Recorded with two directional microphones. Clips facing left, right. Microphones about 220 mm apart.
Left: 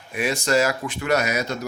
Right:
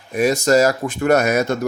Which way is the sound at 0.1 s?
40° right (ahead or behind).